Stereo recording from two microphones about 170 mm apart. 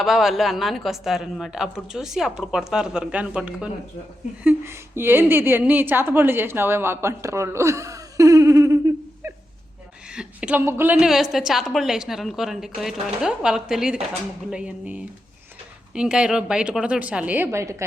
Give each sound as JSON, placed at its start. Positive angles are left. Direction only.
{"t": 0.0, "sound": "a woman's voice", "side_deg": 0}
{"t": 9.2, "sound": "a sound", "side_deg": -15}
{"t": 10.1, "sound": "a woman's voice", "side_deg": -5}
{"t": 10.9, "sound": "a woman's voice", "side_deg": 0}